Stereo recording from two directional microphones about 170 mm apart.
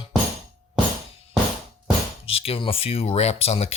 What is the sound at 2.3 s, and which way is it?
Speech, 35° left (ahead or behind).